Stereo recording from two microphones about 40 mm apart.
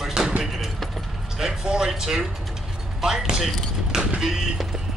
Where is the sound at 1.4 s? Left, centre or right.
Centre.